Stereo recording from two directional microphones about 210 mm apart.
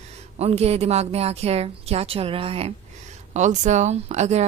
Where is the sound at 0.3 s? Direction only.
30° right (ahead or behind).